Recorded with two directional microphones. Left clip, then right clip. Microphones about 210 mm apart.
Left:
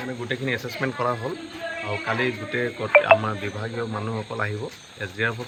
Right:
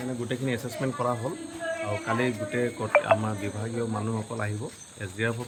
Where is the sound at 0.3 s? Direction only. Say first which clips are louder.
Left 7 dB; 10° right (ahead or behind).